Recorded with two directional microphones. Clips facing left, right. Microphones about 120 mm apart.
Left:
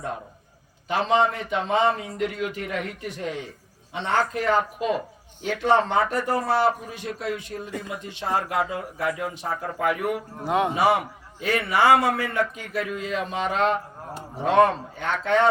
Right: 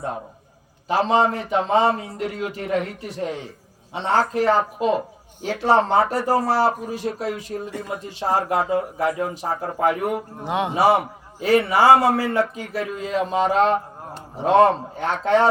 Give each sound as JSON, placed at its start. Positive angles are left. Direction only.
{"t": 0.9, "sound": "speech", "side_deg": -35}
{"t": 10.4, "sound": "a man's voice", "side_deg": 0}
{"t": 10.8, "sound": "speech", "side_deg": -35}